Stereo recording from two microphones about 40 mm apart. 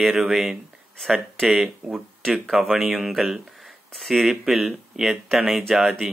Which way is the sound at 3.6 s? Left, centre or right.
Centre.